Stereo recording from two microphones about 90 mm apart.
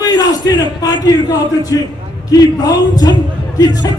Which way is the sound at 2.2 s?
45° left (ahead or behind).